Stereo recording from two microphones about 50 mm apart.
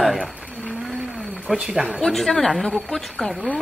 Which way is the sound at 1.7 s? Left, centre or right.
Right.